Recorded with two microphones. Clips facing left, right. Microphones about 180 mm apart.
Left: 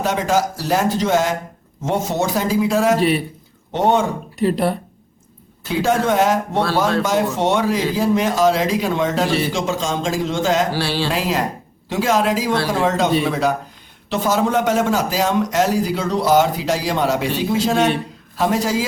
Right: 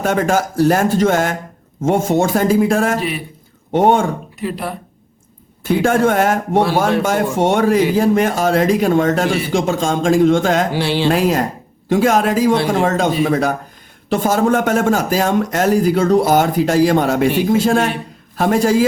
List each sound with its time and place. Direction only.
0.0 s a man's voice: 55° right (ahead or behind)
4.4 s speech: 35° left (ahead or behind)
5.6 s a man's voice: 50° right (ahead or behind)
10.7 s a sound: 20° right (ahead or behind)
11.1 s a man's voice: 50° right (ahead or behind)